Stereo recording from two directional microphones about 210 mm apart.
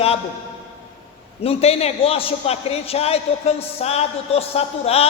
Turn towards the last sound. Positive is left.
turn(degrees=30)  # may be behind; listen again after turning